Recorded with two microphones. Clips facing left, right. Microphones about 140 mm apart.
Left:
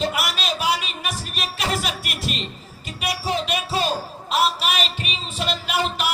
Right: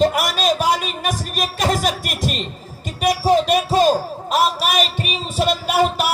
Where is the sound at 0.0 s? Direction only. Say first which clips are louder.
Right 8 dB; 45° right (ahead or behind).